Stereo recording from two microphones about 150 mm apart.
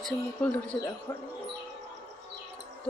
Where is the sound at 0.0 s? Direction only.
5° left (ahead or behind).